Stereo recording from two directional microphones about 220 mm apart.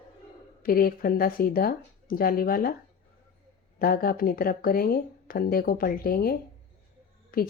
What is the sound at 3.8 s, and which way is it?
A woman's voice, 45° left (ahead or behind).